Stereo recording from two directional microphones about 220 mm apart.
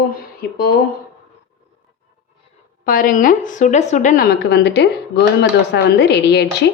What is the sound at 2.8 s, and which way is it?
A woman's voice, 40° left (ahead or behind).